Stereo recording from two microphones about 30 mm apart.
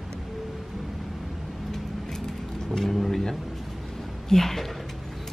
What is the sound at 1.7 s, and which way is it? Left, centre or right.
Vehicle, centre.